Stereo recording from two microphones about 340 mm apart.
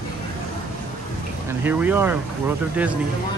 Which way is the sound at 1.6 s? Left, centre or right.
Centre.